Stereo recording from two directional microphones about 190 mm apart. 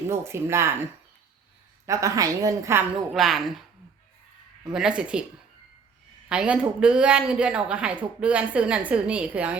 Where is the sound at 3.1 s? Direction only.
Centre (ahead or behind).